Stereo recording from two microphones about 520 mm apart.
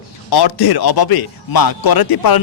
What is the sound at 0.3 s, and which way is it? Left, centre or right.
A man's voice, left.